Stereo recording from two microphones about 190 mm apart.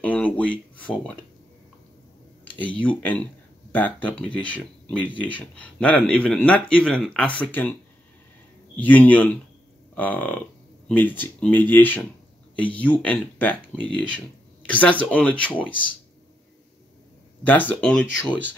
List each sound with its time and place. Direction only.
0.0 s speech: 5° left (ahead or behind)
3.0 s speech: 10° left (ahead or behind)
8.8 s speech: 10° left (ahead or behind)
17.4 s speech: 10° left (ahead or behind)